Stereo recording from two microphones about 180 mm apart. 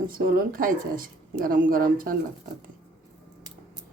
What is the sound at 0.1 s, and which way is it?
A woman's voice, 55° right (ahead or behind).